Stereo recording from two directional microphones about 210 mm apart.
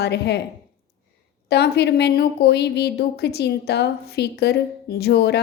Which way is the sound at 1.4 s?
50° left (ahead or behind).